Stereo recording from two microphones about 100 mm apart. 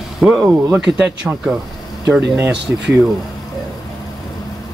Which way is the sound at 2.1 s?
20° right (ahead or behind).